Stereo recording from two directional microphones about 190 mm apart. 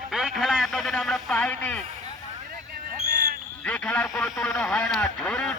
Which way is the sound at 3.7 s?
5° left (ahead or behind).